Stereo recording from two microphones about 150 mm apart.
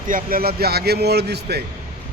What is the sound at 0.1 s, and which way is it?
Speech, 80° right.